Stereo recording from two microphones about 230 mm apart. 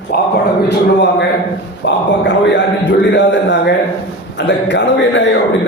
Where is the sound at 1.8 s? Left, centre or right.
Left.